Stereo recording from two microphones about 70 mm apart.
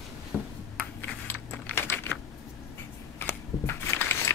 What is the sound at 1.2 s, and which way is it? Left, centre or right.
Typing, left.